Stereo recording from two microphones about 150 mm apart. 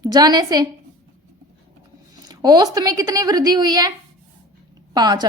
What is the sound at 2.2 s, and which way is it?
A woman's voice, 25° right (ahead or behind).